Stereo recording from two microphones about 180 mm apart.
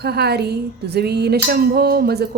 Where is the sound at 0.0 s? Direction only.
65° right (ahead or behind).